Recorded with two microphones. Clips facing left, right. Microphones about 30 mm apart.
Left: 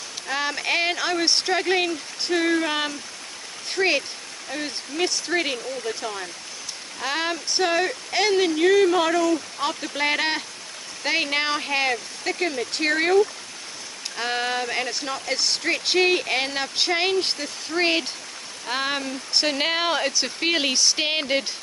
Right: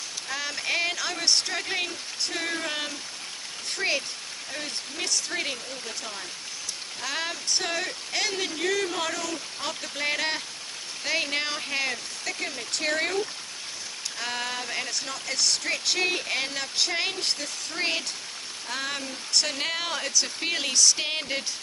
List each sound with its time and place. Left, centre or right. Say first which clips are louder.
0.3 s speech: left 5 dB; left